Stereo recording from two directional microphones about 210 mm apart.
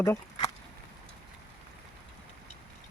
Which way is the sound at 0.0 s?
15° left (ahead or behind).